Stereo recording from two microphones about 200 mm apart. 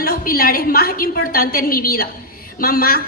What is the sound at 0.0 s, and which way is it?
A woman's voice, 45° left (ahead or behind).